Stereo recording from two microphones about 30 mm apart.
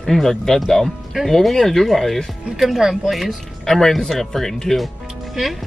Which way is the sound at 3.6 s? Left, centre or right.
Centre.